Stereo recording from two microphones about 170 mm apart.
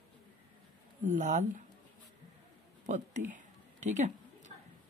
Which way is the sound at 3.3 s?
45° right (ahead or behind).